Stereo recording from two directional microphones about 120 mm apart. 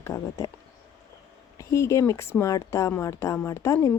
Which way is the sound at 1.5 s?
25° left (ahead or behind).